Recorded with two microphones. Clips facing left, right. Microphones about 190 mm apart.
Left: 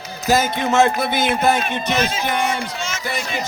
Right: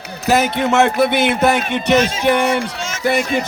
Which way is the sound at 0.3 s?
65° right (ahead or behind).